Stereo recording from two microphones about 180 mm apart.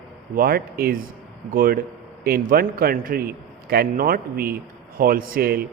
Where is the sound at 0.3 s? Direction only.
55° right (ahead or behind).